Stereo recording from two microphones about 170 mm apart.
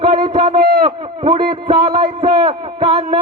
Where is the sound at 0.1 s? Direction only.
30° right (ahead or behind).